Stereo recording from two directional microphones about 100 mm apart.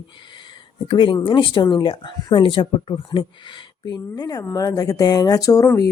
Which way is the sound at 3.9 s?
40° left (ahead or behind).